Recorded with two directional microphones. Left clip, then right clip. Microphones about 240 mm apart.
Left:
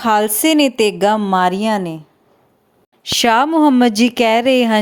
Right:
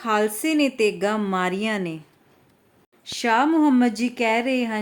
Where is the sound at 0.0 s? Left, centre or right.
Left.